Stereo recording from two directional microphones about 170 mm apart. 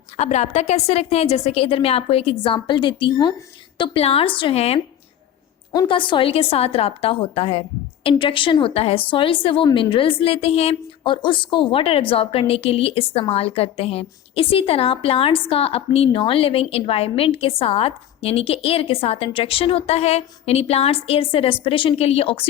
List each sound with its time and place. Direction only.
0.2 s a woman's voice: 40° left (ahead or behind)